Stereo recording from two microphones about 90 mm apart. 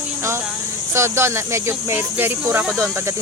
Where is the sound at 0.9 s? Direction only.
30° right (ahead or behind).